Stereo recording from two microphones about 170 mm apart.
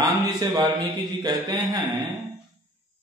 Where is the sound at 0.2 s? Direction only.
20° right (ahead or behind).